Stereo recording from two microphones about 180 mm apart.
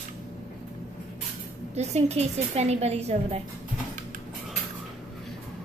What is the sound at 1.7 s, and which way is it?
A woman's voice, 35° right (ahead or behind).